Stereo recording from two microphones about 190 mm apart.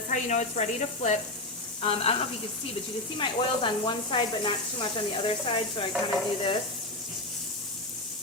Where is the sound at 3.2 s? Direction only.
25° left (ahead or behind).